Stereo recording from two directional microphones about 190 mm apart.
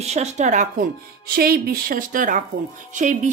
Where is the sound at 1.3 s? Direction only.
55° right (ahead or behind).